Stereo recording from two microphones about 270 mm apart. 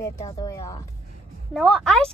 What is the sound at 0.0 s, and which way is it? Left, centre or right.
Speech, centre.